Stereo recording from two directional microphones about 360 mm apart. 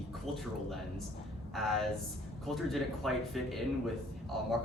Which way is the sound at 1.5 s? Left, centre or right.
Centre.